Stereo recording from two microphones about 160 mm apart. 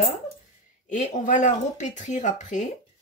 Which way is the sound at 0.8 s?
50° left (ahead or behind).